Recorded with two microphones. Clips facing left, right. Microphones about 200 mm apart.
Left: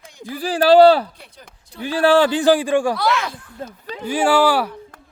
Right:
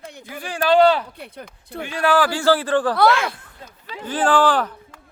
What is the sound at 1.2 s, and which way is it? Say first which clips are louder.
Speech: right 8 dB; 60° right (ahead or behind).